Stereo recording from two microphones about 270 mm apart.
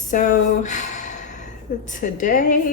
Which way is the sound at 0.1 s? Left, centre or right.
Left.